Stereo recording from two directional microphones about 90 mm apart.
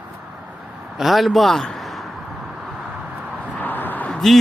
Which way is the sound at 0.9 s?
Centre (ahead or behind).